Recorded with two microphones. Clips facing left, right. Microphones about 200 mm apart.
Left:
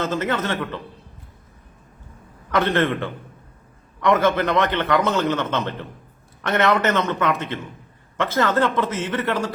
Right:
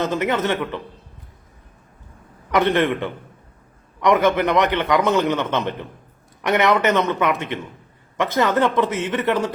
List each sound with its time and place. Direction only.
0.0 s a man's voice: 15° right (ahead or behind)
2.5 s a man's voice: 15° right (ahead or behind)